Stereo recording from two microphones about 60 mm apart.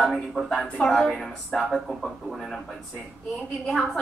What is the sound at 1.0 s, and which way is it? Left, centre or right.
A man's voice, centre.